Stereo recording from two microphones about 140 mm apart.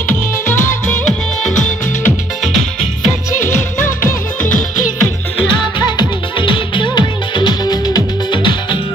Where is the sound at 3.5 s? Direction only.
65° left (ahead or behind).